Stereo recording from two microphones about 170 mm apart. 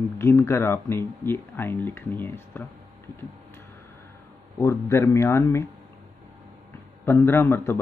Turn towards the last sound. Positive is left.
turn(degrees=15)  # may be behind; listen again after turning